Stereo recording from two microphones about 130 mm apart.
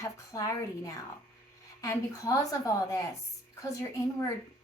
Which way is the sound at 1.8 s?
25° left (ahead or behind).